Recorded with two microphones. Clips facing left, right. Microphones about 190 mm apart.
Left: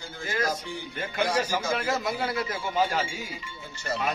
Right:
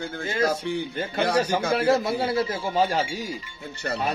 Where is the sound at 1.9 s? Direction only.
30° right (ahead or behind).